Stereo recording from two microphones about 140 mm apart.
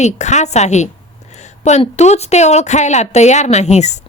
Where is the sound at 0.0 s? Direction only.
55° left (ahead or behind).